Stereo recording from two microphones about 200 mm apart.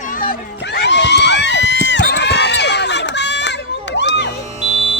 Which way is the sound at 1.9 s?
60° left (ahead or behind).